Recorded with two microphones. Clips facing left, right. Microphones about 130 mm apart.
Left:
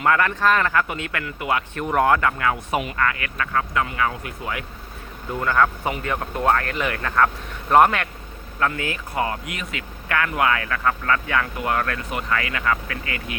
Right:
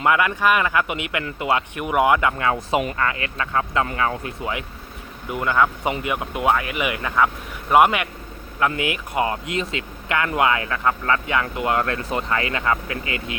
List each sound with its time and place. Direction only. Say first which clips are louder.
0.0 s speech: right 1 dB; 15° right (ahead or behind)
1.8 s speech: even; 10° right (ahead or behind)
2.4 s speech: right 2 dB; 25° right (ahead or behind)